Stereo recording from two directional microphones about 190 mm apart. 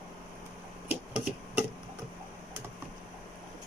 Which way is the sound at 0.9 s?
5° right (ahead or behind).